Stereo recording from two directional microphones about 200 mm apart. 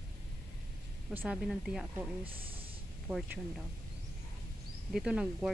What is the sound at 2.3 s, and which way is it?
Speech, 25° right (ahead or behind).